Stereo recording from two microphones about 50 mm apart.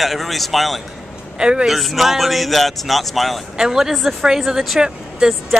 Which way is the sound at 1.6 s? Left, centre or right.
Centre.